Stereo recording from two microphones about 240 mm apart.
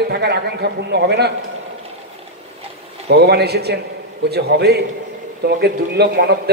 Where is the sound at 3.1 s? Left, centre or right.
Right.